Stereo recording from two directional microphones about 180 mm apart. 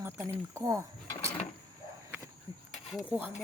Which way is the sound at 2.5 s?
20° right (ahead or behind).